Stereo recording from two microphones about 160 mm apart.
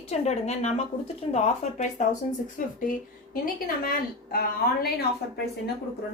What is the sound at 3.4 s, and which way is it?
Speech, 65° left (ahead or behind).